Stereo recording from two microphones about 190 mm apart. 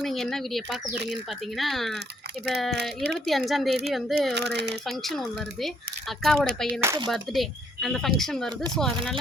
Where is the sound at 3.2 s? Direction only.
Centre (ahead or behind).